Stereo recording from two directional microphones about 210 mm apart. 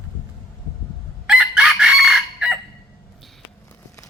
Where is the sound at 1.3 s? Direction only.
5° right (ahead or behind).